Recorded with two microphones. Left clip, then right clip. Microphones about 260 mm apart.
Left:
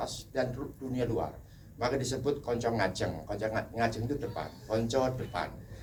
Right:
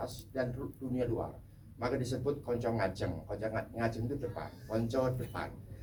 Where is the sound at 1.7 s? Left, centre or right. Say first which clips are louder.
Left 4 dB; left.